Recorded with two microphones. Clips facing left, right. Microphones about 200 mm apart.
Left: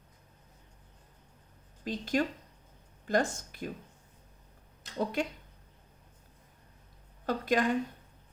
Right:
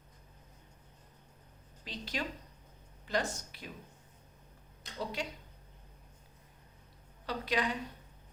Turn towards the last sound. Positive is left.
turn(degrees=50)  # may be behind; listen again after turning